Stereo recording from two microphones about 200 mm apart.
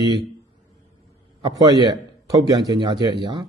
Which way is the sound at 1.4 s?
20° right (ahead or behind).